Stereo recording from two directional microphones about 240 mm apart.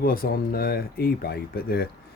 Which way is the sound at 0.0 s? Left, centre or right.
Left.